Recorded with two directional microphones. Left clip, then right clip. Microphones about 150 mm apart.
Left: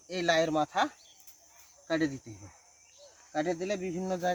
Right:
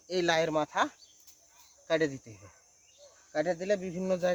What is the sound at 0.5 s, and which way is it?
Speech, 5° right (ahead or behind).